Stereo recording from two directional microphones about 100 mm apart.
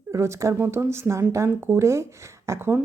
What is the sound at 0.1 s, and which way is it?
A woman's voice, 30° right (ahead or behind).